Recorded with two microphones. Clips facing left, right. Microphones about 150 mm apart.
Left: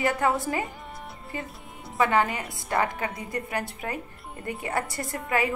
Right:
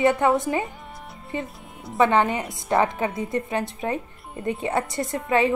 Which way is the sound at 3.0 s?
25° right (ahead or behind).